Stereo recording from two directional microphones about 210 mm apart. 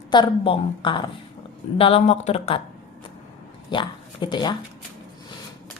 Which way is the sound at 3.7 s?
20° left (ahead or behind).